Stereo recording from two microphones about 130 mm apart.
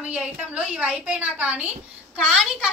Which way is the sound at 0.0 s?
10° right (ahead or behind).